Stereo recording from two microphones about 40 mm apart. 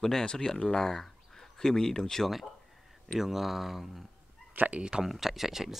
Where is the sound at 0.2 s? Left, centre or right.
Left.